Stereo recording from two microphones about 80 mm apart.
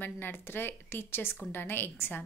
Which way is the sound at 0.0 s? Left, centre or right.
Left.